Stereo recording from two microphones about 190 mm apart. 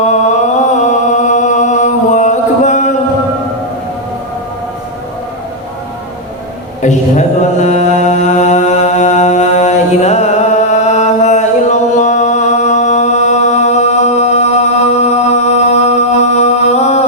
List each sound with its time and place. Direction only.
0.8 s chant: 40° left (ahead or behind)
6.8 s mantra: 40° left (ahead or behind)